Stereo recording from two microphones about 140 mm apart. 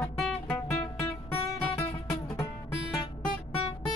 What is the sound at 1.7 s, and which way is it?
Music, 25° left (ahead or behind).